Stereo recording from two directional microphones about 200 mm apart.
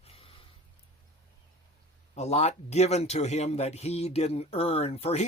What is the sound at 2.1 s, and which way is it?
Speech, 30° left (ahead or behind).